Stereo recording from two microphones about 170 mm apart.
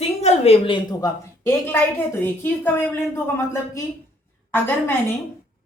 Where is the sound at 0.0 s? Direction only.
40° left (ahead or behind); by 4.9 s 10° left (ahead or behind).